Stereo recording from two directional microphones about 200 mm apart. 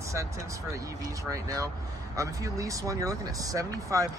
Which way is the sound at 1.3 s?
15° right (ahead or behind).